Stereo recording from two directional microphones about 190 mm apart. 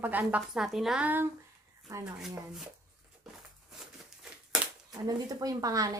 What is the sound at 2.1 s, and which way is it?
Speech, centre (ahead or behind).